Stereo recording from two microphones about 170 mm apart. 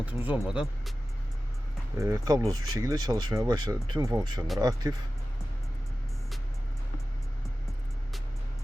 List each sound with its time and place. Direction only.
0.0 s speech: 10° right (ahead or behind)
2.0 s speech: 20° right (ahead or behind)